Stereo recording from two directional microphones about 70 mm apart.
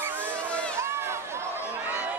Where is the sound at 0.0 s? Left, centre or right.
Right.